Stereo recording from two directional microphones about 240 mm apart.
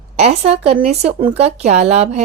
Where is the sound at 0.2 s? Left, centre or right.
Right.